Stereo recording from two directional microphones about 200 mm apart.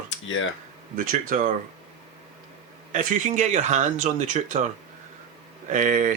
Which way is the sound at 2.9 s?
40° right (ahead or behind).